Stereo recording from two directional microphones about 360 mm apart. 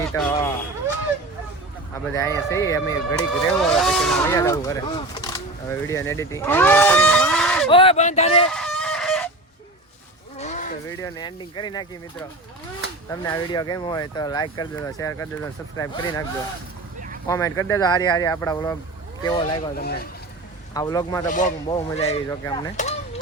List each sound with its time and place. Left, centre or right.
0.1 s speech: centre
2.1 s speech: centre
7.7 s speech: centre
8.4 s chicken: centre
10.3 s a sound: centre
10.8 s speech: centre
13.1 s speech: centre
17.2 s speech: centre
19.7 s speech: left
20.7 s speech: centre
21.2 s speech: left